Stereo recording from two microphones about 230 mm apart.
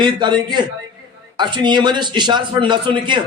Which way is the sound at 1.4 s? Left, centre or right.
Centre.